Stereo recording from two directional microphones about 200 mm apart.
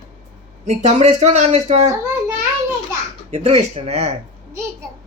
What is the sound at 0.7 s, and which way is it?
Speech, 35° right (ahead or behind).